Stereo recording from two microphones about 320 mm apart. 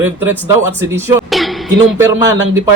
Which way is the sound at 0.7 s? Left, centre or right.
Centre.